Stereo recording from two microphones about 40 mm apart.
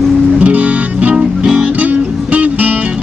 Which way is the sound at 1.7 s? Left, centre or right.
Right.